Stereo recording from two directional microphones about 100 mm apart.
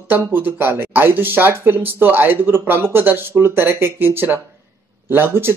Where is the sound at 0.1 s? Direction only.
20° right (ahead or behind).